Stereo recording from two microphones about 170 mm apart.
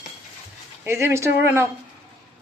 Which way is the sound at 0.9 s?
15° right (ahead or behind).